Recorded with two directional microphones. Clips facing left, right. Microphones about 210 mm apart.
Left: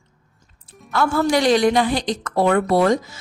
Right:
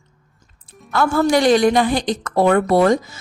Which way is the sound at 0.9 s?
50° right (ahead or behind).